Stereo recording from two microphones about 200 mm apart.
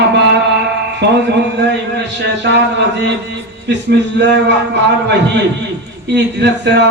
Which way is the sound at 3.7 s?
60° right (ahead or behind).